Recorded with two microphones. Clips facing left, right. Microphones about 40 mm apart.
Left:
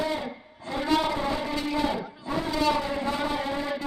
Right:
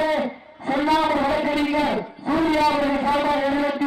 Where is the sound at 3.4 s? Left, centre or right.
Right.